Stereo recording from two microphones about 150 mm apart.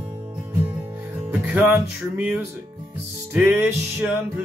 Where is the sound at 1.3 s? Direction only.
10° right (ahead or behind).